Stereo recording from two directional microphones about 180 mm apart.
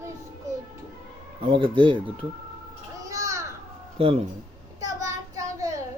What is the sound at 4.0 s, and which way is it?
Speech, 30° right (ahead or behind).